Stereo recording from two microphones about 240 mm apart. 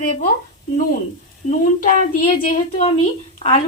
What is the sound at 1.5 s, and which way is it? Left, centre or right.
Speech, left.